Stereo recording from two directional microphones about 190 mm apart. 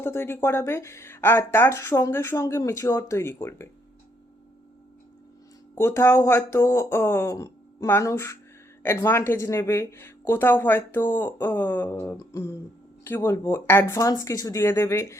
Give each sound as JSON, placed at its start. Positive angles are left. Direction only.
{"t": 0.0, "sound": "speech", "side_deg": 15}
{"t": 5.7, "sound": "speech", "side_deg": 15}